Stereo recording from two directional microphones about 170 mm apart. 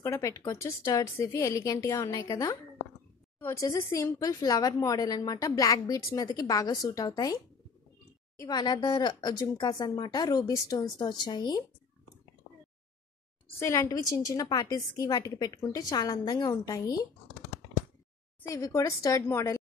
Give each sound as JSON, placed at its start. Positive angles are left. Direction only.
{"t": 0.0, "sound": "a woman's voice", "side_deg": 15}
{"t": 8.4, "sound": "a woman's voice", "side_deg": 25}
{"t": 13.6, "sound": "a woman's voice", "side_deg": 15}
{"t": 18.5, "sound": "a woman's voice", "side_deg": 20}